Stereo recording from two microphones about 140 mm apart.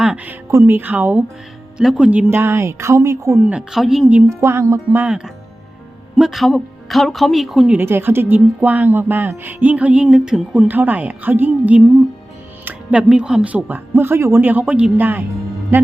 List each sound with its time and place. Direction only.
0.0 s speech: 10° right (ahead or behind)
4.3 s speech: 20° right (ahead or behind); by 7.8 s 5° right (ahead or behind)
7.8 s speech: 15° right (ahead or behind)